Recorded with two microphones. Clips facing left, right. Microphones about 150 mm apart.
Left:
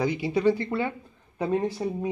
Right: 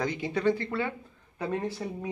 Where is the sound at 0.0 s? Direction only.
10° left (ahead or behind).